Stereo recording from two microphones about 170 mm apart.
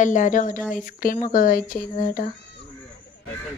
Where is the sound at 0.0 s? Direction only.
50° left (ahead or behind).